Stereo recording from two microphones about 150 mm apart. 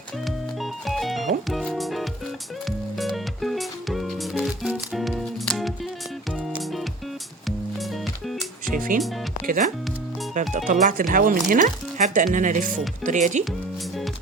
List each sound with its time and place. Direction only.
0.3 s music: centre (ahead or behind)
8.3 s music: centre (ahead or behind)
8.7 s music: 65° right (ahead or behind)
9.5 s speech: 60° right (ahead or behind)